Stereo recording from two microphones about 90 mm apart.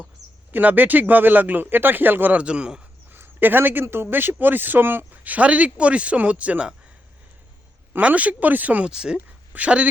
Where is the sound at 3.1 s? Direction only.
20° right (ahead or behind).